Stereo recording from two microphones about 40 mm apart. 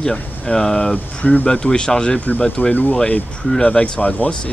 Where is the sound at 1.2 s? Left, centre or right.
Left.